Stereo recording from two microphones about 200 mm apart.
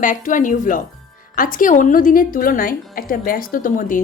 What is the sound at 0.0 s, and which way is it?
A woman's voice, 40° left (ahead or behind).